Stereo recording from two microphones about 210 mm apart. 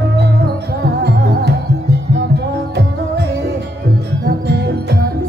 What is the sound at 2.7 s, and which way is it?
Music, 55° right (ahead or behind).